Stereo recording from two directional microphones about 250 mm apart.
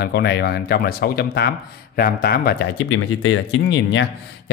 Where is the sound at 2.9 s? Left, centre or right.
Left.